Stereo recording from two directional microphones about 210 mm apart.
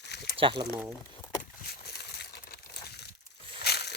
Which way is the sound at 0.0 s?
55° left (ahead or behind).